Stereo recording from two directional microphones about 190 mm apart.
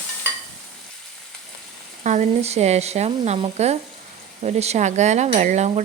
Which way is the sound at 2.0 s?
35° right (ahead or behind).